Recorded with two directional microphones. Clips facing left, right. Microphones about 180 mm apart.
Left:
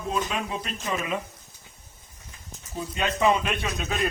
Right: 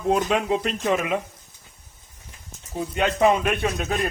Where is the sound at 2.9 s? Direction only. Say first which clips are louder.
Right 4 dB; 60° right (ahead or behind).